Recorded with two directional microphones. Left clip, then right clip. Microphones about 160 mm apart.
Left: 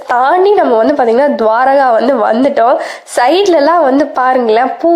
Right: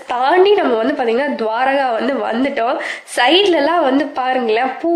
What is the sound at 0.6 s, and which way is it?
Speech, 20° left (ahead or behind).